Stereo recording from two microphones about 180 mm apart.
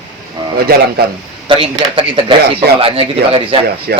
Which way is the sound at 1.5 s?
30° right (ahead or behind).